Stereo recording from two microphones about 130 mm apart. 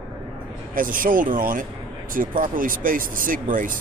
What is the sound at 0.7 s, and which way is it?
Speech, 90° right.